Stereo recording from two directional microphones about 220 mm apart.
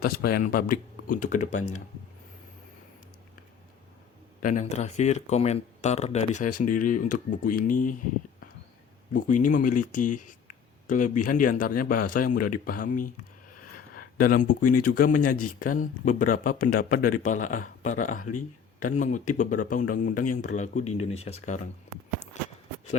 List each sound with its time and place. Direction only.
0.0 s speech: 45° left (ahead or behind)
4.4 s speech: 35° left (ahead or behind)
9.1 s speech: 35° left (ahead or behind)
13.7 s a sound: 40° left (ahead or behind)
14.8 s speech: 40° left (ahead or behind)
22.3 s a sound: 35° left (ahead or behind)